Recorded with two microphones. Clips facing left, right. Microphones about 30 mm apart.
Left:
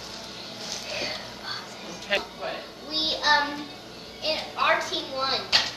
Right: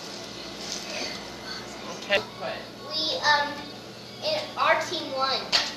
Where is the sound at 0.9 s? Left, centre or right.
Left.